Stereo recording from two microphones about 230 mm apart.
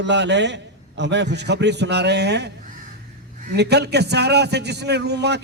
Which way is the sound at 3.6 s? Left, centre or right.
Right.